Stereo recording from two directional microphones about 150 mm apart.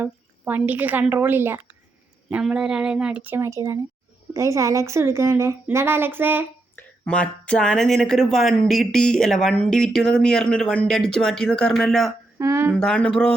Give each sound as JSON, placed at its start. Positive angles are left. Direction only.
{"t": 0.0, "sound": "speech", "side_deg": -10}
{"t": 6.7, "sound": "speech", "side_deg": 5}
{"t": 12.4, "sound": "speech", "side_deg": -15}
{"t": 12.7, "sound": "speech", "side_deg": 5}